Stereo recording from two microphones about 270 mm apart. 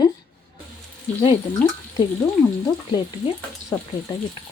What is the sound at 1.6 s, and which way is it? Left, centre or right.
Speech, centre.